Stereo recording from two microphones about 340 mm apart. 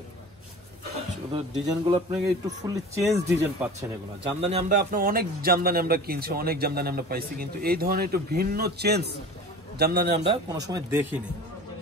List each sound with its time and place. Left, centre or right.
1.3 s a man's voice: centre